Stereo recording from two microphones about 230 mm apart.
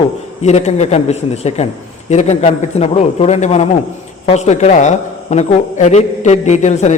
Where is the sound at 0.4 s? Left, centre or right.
Left.